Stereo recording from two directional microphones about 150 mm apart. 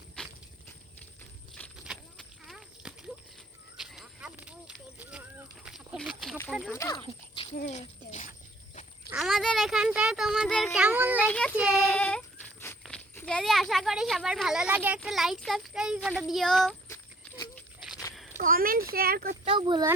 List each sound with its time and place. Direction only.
1.8 s horse: 5° right (ahead or behind)
3.8 s a sound: 5° right (ahead or behind)
6.7 s speech: 20° left (ahead or behind)
7.3 s a sound: 45° left (ahead or behind)
9.1 s speech: centre (ahead or behind)
11.3 s child singing: 10° left (ahead or behind)
11.5 s speech: 5° right (ahead or behind)
11.9 s a sound: 10° left (ahead or behind)
13.1 s speech: 5° left (ahead or behind)
17.5 s a sound: centre (ahead or behind)
18.3 s speech: 70° right (ahead or behind)
18.9 s speech: 85° right
19.5 s speech: 35° right (ahead or behind)